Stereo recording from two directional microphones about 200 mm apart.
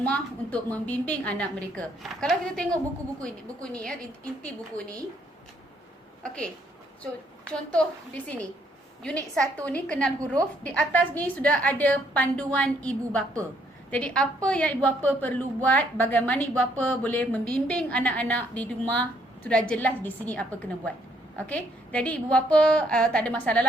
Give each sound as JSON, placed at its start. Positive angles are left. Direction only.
{"t": 0.0, "sound": "a woman's voice", "side_deg": 5}
{"t": 6.2, "sound": "a woman's voice", "side_deg": 5}
{"t": 7.5, "sound": "a woman's voice", "side_deg": 5}
{"t": 9.0, "sound": "a woman's voice", "side_deg": 5}